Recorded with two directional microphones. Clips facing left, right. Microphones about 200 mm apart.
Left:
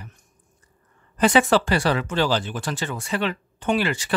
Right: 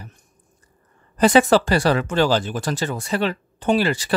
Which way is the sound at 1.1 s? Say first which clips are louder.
Right 3 dB; 40° right (ahead or behind).